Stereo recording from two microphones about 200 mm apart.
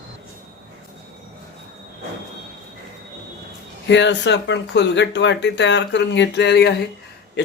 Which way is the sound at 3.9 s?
60° left (ahead or behind).